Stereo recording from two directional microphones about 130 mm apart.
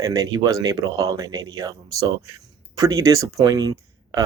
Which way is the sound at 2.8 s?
25° right (ahead or behind).